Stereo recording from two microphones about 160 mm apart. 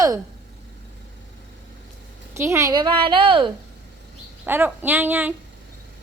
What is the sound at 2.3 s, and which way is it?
A woman's voice, 15° right (ahead or behind).